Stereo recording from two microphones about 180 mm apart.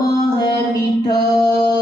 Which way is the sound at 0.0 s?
20° left (ahead or behind).